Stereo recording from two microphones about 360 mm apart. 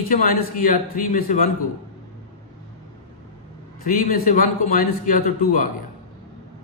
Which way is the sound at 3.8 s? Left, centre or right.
Left.